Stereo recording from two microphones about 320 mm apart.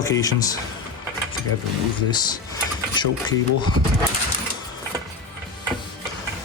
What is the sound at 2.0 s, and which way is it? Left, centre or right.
Speech, centre.